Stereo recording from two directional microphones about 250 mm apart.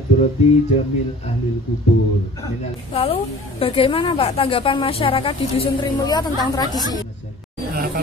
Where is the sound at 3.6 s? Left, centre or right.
Left.